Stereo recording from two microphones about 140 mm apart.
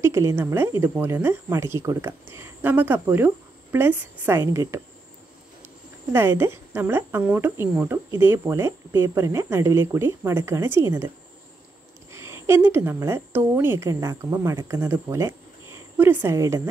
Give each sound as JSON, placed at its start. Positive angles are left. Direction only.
{"t": 0.0, "sound": "speech", "side_deg": -20}
{"t": 6.1, "sound": "speech", "side_deg": -15}
{"t": 12.1, "sound": "a woman's voice", "side_deg": -20}